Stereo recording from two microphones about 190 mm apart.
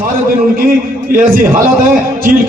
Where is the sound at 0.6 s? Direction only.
50° right (ahead or behind).